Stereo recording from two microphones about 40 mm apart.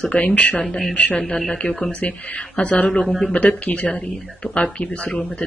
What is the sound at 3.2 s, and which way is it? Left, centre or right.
Speech, left.